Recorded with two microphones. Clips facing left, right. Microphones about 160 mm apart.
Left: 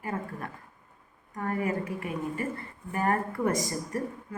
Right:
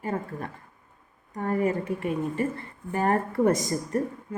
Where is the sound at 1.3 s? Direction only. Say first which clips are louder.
Right 4 dB; 25° right (ahead or behind).